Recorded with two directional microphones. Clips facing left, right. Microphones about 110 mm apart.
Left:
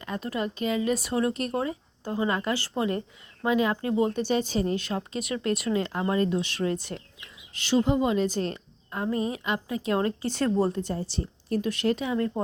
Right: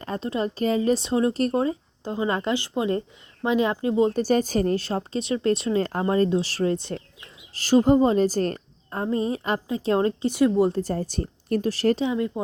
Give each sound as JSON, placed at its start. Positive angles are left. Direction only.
{"t": 0.0, "sound": "speech", "side_deg": -30}
{"t": 4.1, "sound": "speech", "side_deg": -40}
{"t": 4.8, "sound": "speech", "side_deg": -35}
{"t": 5.8, "sound": "speech", "side_deg": -40}
{"t": 10.2, "sound": "speech", "side_deg": -15}
{"t": 10.7, "sound": "speech", "side_deg": -40}
{"t": 11.6, "sound": "speech", "side_deg": -40}
{"t": 12.0, "sound": "speech", "side_deg": -15}